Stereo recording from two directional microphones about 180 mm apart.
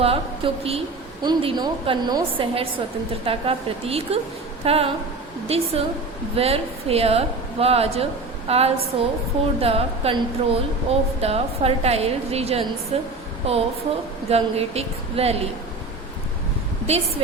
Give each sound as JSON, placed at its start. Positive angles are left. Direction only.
{"t": 0.0, "sound": "a woman's voice", "side_deg": -35}
{"t": 16.9, "sound": "a woman's voice", "side_deg": -35}